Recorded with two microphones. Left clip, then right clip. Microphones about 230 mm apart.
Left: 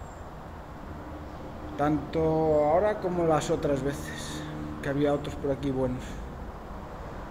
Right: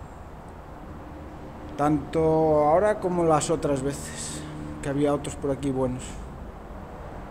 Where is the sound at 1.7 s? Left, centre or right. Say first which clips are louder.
Right 3 dB; right.